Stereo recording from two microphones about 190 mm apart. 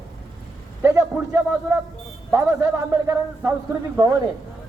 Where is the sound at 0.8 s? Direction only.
15° right (ahead or behind).